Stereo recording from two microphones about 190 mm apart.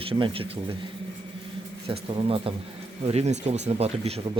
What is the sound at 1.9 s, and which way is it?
Speech, 30° right (ahead or behind).